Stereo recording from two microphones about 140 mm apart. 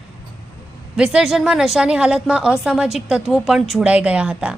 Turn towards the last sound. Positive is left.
turn(degrees=-10)  # may be behind; listen again after turning